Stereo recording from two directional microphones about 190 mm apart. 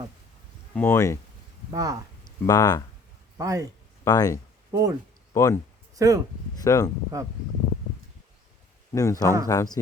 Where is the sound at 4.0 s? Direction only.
20° left (ahead or behind).